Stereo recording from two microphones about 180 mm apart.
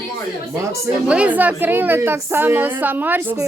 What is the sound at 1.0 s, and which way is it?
A woman's voice, 5° right (ahead or behind).